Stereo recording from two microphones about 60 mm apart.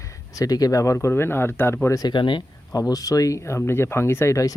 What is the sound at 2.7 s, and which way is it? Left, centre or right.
Speech, left.